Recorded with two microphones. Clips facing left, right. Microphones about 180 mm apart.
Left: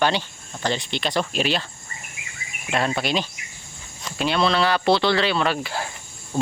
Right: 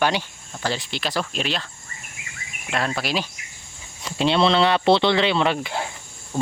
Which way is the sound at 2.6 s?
Centre (ahead or behind).